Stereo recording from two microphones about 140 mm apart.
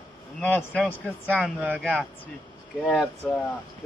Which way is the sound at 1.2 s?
10° right (ahead or behind).